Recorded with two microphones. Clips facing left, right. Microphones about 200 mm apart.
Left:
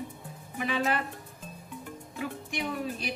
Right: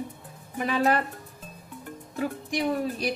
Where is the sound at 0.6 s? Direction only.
40° right (ahead or behind).